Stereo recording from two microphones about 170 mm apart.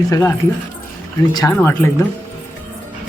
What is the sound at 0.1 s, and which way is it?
Speech, 15° left (ahead or behind).